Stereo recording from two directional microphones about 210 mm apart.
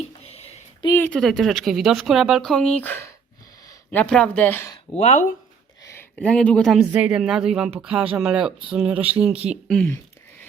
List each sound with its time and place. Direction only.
0.0 s a sound: 30° left (ahead or behind)
0.9 s speech: 5° left (ahead or behind)
4.9 s speech: 35° left (ahead or behind)
5.8 s speech: 10° left (ahead or behind)